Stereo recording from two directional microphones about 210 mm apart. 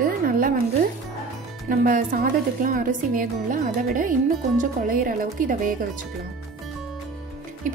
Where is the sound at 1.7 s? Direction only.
40° right (ahead or behind).